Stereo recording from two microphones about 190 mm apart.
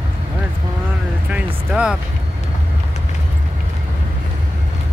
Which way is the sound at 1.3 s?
5° right (ahead or behind).